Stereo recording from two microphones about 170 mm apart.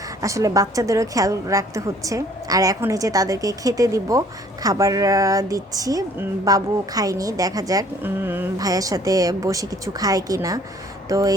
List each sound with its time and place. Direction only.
0.2 s speech: 20° right (ahead or behind)